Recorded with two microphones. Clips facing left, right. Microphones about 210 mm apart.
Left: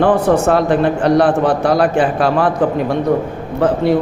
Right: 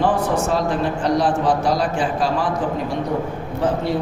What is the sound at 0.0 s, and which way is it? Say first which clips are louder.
A man's voice: left 7 dB; 60° left (ahead or behind).